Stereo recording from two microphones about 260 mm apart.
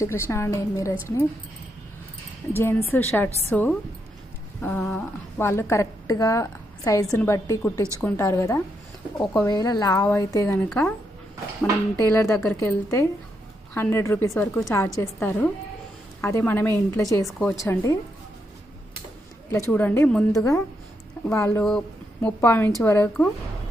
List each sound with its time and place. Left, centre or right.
0.0 s a woman's voice: centre
2.5 s a woman's voice: centre
12.1 s a woman's voice: centre
19.7 s a woman's voice: centre